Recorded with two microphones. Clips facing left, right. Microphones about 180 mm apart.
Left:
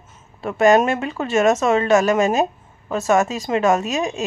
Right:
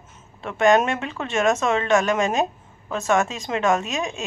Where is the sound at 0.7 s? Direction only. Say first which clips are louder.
Left 3 dB; 5° left (ahead or behind).